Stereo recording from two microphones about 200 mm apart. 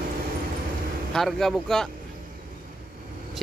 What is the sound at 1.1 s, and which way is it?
Speech, centre (ahead or behind).